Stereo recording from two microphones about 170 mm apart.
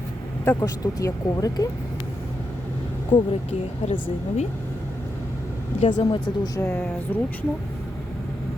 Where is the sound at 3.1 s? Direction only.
25° left (ahead or behind).